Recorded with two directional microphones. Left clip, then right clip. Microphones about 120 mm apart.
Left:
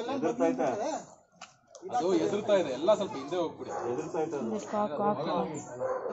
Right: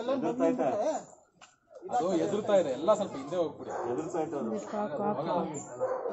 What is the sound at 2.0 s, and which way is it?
Speech, 30° right (ahead or behind).